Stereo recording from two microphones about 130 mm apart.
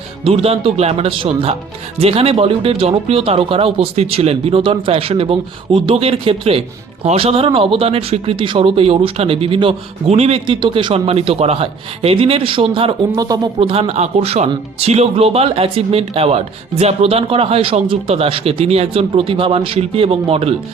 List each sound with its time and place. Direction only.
0.3 s speech: 50° right (ahead or behind)
13.1 s speech: 30° right (ahead or behind)
13.6 s speech: 45° right (ahead or behind)